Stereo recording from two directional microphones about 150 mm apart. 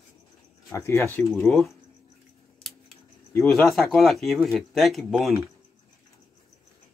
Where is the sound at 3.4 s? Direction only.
Centre (ahead or behind).